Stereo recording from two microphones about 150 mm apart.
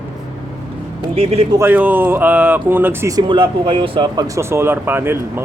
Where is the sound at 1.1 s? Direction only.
40° right (ahead or behind).